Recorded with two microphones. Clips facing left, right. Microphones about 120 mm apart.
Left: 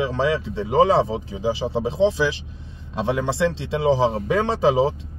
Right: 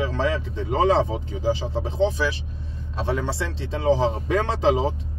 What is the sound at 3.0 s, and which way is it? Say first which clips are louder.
Speech: left 3 dB; 15° left (ahead or behind).